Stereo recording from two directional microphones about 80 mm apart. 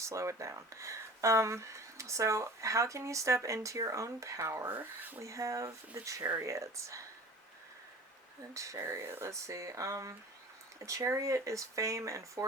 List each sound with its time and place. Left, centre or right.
0.0 s speech: right
4.7 s speech: right
5.2 s speech: right
8.5 s speech: right